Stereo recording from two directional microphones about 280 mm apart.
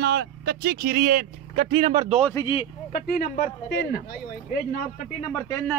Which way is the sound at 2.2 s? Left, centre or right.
Centre.